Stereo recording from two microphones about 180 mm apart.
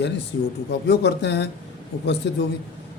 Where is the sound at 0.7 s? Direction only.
70° left (ahead or behind).